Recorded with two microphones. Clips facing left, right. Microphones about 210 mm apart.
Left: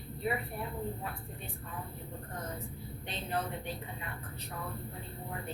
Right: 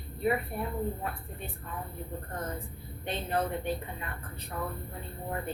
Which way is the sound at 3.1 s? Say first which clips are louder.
Right 6 dB; 55° right (ahead or behind).